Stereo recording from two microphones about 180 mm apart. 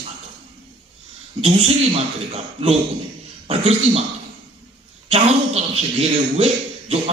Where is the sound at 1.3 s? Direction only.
35° right (ahead or behind).